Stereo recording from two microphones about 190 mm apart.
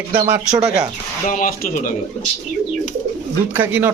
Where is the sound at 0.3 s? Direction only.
10° right (ahead or behind).